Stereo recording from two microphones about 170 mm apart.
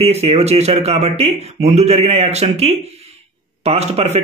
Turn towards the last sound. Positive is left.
turn(degrees=-40)  # may be behind; listen again after turning